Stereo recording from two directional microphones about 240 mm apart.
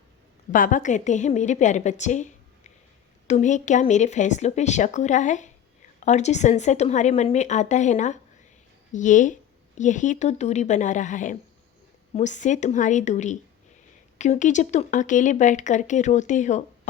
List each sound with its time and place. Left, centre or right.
0.5 s a woman's voice: left